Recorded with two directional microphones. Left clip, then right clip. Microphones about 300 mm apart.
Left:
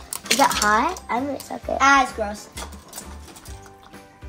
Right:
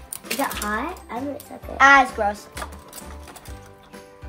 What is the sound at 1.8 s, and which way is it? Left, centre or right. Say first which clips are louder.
Speech: right 3 dB; right.